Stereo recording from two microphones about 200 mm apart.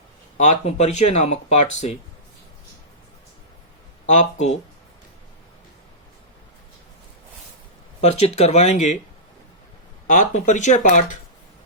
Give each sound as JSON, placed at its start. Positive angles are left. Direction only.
{"t": 0.3, "sound": "speech", "side_deg": 35}
{"t": 4.0, "sound": "speech", "side_deg": 35}
{"t": 8.0, "sound": "speech", "side_deg": 35}
{"t": 10.1, "sound": "speech", "side_deg": 40}